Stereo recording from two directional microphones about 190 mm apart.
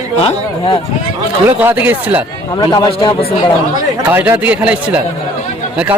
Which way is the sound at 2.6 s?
20° left (ahead or behind).